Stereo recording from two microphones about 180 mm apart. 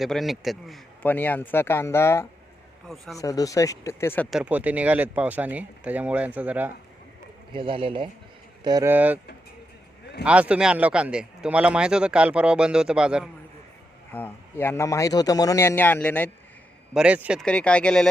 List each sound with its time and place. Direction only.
0.0 s a man's voice: centre (ahead or behind)
2.8 s a man's voice: centre (ahead or behind)
3.2 s a man's voice: 20° left (ahead or behind)
4.3 s speech: 5° right (ahead or behind)
7.5 s speech: 30° right (ahead or behind)
8.6 s speech: 20° right (ahead or behind)
10.2 s a man's voice: 5° right (ahead or behind)
14.1 s a man's voice: 10° left (ahead or behind)
16.9 s a man's voice: 5° right (ahead or behind)
17.4 s a man's voice: 5° left (ahead or behind)